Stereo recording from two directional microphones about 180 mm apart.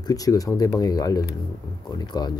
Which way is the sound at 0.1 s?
20° left (ahead or behind).